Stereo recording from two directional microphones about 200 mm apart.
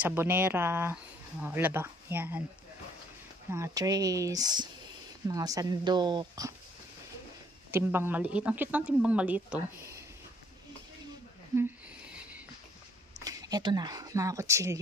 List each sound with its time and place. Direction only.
0.0 s speech: 10° right (ahead or behind)
3.4 s speech: 15° right (ahead or behind)
7.7 s speech: 10° right (ahead or behind)
11.5 s a sound: 10° right (ahead or behind)
13.2 s speech: 20° right (ahead or behind)